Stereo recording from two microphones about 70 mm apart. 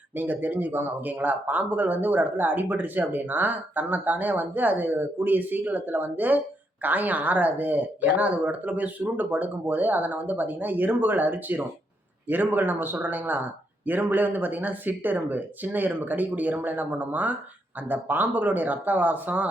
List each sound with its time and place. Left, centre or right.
0.2 s speech: right